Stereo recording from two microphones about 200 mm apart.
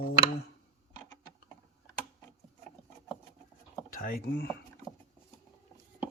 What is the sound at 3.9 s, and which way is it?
Speech, 45° left (ahead or behind).